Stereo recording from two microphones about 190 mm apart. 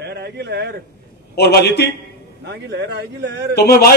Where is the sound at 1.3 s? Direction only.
60° left (ahead or behind).